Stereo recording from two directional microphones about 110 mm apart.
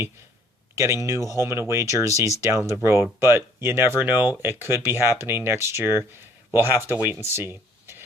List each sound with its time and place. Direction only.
1.0 s speech: 25° right (ahead or behind)